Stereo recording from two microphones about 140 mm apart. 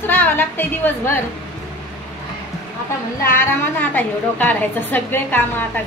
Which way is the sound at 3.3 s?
15° left (ahead or behind).